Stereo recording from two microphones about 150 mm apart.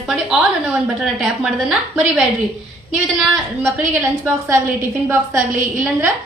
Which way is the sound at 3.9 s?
15° right (ahead or behind).